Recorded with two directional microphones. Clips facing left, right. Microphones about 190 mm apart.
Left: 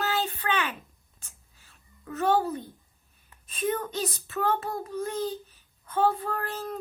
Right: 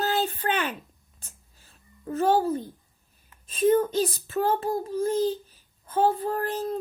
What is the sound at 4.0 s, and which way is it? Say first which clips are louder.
A child's voice: right 5 dB; 35° right (ahead or behind).